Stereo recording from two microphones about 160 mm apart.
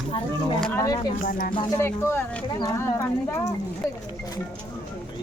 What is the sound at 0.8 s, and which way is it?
Speech, 25° left (ahead or behind).